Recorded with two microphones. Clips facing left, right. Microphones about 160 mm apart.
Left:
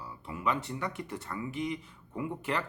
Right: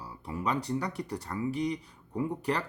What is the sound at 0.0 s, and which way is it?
Speech, 35° right (ahead or behind).